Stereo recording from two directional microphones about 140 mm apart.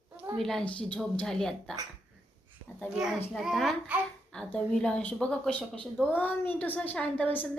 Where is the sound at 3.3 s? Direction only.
Centre (ahead or behind).